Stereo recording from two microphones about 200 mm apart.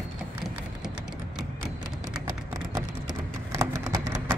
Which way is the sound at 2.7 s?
20° right (ahead or behind).